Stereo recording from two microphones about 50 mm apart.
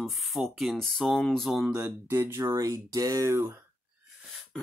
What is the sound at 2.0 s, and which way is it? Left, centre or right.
Speech, right.